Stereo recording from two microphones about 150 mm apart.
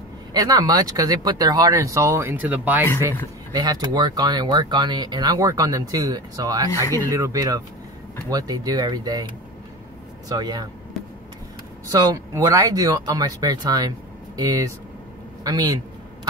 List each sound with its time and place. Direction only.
0.3 s speech: 25° right (ahead or behind)
3.5 s speech: 25° right (ahead or behind)
11.9 s speech: 25° right (ahead or behind)